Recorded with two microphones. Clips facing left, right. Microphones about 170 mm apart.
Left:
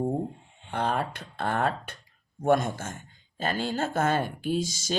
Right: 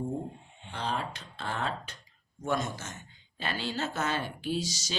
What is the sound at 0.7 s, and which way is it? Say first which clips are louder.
Speech: left 6 dB; 55° left (ahead or behind).